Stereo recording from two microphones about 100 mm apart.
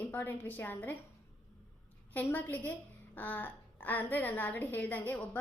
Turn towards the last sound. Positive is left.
turn(degrees=15)  # may be behind; listen again after turning